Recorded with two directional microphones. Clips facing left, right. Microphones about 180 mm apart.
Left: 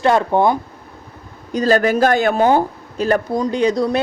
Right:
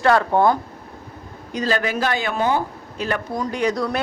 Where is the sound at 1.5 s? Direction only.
40° left (ahead or behind).